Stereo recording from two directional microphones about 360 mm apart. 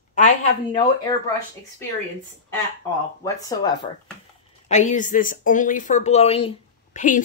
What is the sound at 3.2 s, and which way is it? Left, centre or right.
A woman's voice, centre.